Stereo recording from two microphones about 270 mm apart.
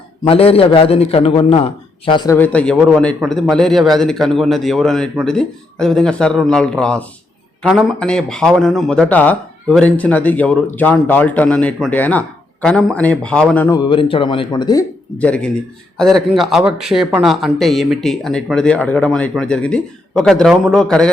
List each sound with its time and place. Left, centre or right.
0.3 s a man's voice: left; by 21.1 s centre